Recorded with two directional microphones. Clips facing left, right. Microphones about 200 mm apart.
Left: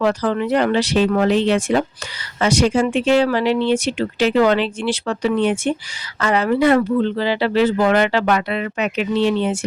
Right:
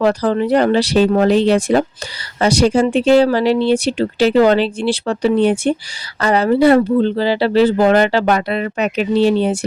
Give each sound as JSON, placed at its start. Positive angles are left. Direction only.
{"t": 0.0, "sound": "speech", "side_deg": -35}